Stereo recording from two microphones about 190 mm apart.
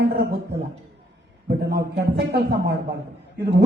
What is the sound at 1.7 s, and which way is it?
Speech, 60° right (ahead or behind).